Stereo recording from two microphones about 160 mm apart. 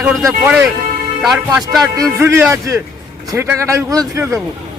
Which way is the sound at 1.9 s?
20° right (ahead or behind).